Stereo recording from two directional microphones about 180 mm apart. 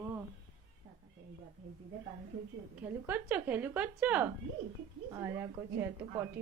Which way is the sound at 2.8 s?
10° right (ahead or behind).